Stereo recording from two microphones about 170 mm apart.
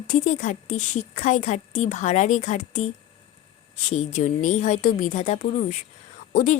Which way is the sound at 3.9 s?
45° left (ahead or behind).